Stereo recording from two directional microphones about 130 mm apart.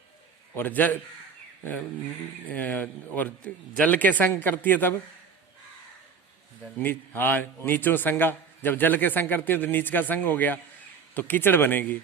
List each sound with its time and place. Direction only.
0.5 s a man's voice: 15° left (ahead or behind)
2.5 s a man's voice: 10° left (ahead or behind)
6.7 s a man's voice: 15° left (ahead or behind)